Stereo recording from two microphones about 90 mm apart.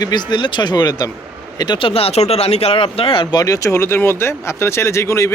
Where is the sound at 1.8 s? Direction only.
90° left.